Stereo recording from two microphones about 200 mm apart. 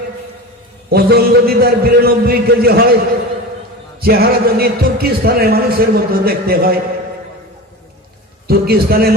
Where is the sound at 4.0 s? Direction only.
50° right (ahead or behind).